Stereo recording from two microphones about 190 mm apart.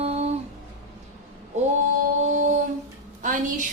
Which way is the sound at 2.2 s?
40° right (ahead or behind).